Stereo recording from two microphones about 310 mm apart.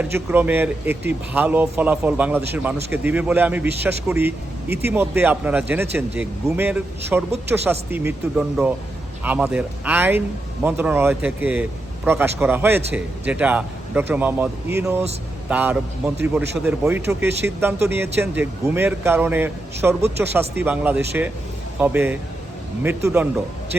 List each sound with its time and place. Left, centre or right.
0.0 s speech: centre
3.7 s speech: right
4.1 s a man's voice: centre